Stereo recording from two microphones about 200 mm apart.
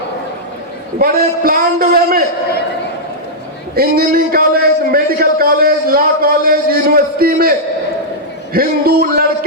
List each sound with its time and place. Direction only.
0.9 s a man's voice: 50° right (ahead or behind)
3.8 s a man's voice: 50° right (ahead or behind)
8.5 s a man's voice: 50° right (ahead or behind)